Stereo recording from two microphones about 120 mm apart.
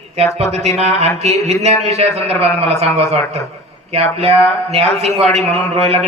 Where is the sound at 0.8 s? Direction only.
65° right (ahead or behind).